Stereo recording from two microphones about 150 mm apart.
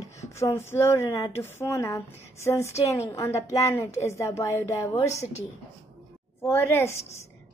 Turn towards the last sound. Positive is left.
turn(degrees=20)  # may be behind; listen again after turning